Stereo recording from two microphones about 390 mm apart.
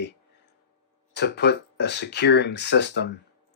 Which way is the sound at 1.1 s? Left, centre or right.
Left.